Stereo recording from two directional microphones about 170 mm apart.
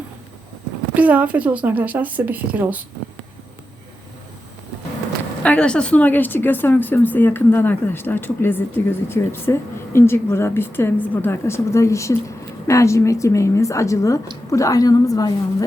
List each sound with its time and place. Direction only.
0.9 s a woman's voice: 10° right (ahead or behind)
5.4 s a woman's voice: 5° left (ahead or behind)